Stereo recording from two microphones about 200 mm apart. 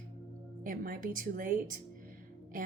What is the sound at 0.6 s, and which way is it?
A woman's voice, 45° right (ahead or behind).